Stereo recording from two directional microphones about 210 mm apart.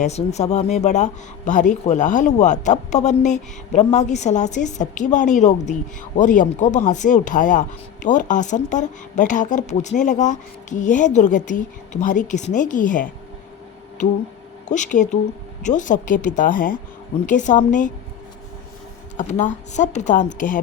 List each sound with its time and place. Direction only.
0.0 s speech: 30° left (ahead or behind)
19.1 s speech: 35° left (ahead or behind)